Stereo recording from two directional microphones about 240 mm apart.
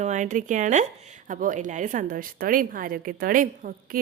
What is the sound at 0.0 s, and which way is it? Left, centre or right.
A woman's voice, right.